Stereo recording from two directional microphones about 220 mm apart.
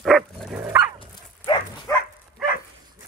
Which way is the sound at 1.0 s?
20° left (ahead or behind).